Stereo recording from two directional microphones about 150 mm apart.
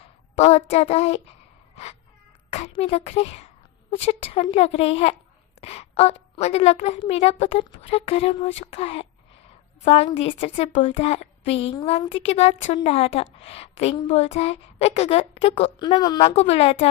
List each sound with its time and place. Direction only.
0.0 s a woman's voice: 45° left (ahead or behind)
1.7 s a sound: 45° left (ahead or behind)
2.7 s a woman's voice: 40° left (ahead or behind)
15.8 s a woman's voice: 30° left (ahead or behind)
16.2 s a woman's voice: 45° left (ahead or behind)